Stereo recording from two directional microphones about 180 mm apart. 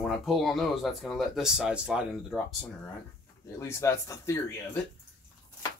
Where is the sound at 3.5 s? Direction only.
15° left (ahead or behind).